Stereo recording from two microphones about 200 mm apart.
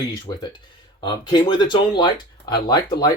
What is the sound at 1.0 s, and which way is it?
Speech, 20° left (ahead or behind).